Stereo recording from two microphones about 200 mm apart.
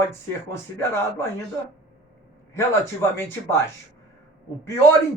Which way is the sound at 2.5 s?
15° left (ahead or behind).